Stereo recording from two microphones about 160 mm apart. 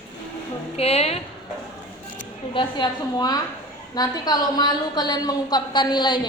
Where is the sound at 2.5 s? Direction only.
30° left (ahead or behind).